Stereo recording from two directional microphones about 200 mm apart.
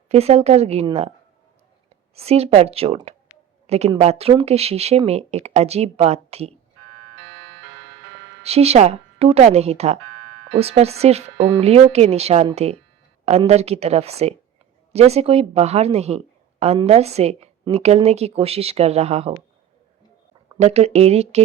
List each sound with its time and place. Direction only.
0.1 s a woman's voice: 30° right (ahead or behind)
2.1 s a woman's voice: 30° right (ahead or behind)
8.4 s a woman's voice: 30° right (ahead or behind)
20.6 s a woman's voice: 30° right (ahead or behind)